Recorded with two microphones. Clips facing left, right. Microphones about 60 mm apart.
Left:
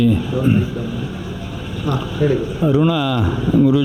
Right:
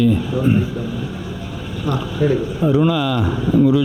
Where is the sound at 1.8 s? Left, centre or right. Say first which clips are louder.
Even; left.